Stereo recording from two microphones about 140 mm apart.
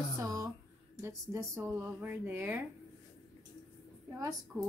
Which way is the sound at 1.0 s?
20° right (ahead or behind).